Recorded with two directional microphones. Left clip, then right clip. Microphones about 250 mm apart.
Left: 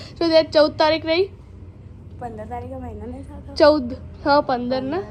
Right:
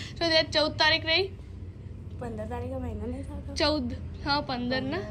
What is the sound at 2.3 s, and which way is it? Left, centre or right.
Speech, centre.